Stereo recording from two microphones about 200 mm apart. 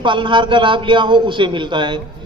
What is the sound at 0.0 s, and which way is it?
Speech, 25° right (ahead or behind).